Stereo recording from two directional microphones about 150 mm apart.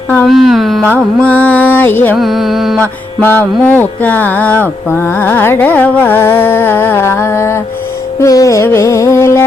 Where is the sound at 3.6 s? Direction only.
10° left (ahead or behind).